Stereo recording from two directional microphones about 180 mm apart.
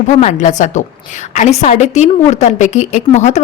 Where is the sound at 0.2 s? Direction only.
40° left (ahead or behind).